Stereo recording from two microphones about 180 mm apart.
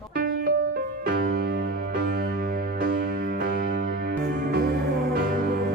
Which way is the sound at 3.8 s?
75° right (ahead or behind).